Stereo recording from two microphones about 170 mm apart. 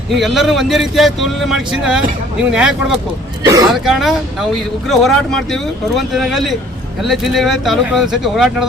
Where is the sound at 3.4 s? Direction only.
20° right (ahead or behind).